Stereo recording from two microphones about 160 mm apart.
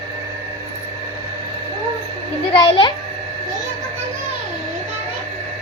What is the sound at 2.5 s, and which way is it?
Speech, 30° left (ahead or behind).